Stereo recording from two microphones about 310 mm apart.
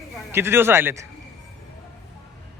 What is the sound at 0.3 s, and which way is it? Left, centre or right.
Speech, centre.